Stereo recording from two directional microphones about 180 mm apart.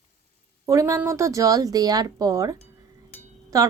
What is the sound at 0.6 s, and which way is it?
Speech, 15° right (ahead or behind).